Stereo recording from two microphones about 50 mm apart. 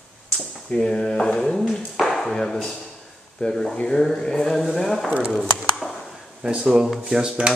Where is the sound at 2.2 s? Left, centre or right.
Centre.